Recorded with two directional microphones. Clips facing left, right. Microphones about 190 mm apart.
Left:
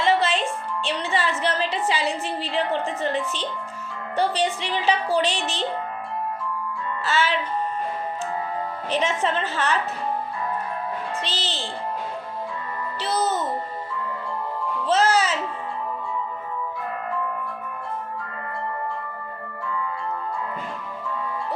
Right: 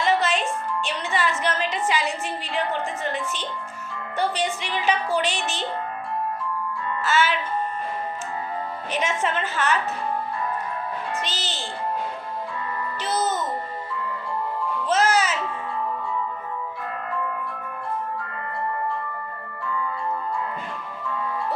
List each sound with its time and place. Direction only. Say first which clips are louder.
0.0 s music: left 1 dB; 30° left (ahead or behind)
0.9 s a sound: left 2 dB; 35° left (ahead or behind)
4.2 s speech: left 2 dB; 35° left (ahead or behind)
7.0 s music: right 1 dB; 35° left (ahead or behind)
8.9 s speech: left 2 dB; 35° left (ahead or behind)
11.2 s speech: left 1 dB; 35° left (ahead or behind)
13.0 s a child's voice: left 1 dB; 35° left (ahead or behind)
14.8 s music: left 1 dB; 35° left (ahead or behind)